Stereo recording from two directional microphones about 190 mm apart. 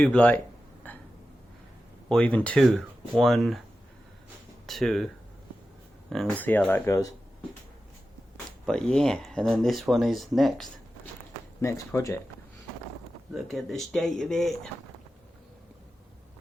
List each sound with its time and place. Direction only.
0.0 s speech: 5° left (ahead or behind)
0.9 s burping: 10° left (ahead or behind)
2.0 s speech: 5° left (ahead or behind)
4.6 s speech: centre (ahead or behind)
8.6 s speech: 5° left (ahead or behind)
13.3 s speech: centre (ahead or behind)